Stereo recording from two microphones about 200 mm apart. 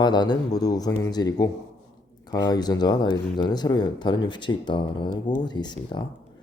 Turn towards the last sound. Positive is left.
turn(degrees=20)  # may be behind; listen again after turning